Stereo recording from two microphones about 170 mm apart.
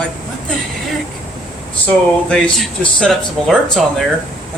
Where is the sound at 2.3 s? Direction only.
5° left (ahead or behind).